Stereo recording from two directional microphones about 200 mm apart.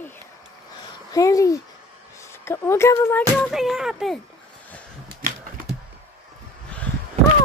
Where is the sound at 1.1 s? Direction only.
15° left (ahead or behind).